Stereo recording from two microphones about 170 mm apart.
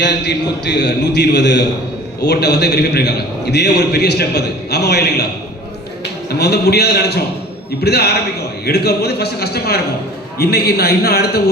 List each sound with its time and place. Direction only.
0.0 s a man's voice: 90° left
2.2 s a man's voice: 80° left
6.4 s a man's voice: 70° left (ahead or behind)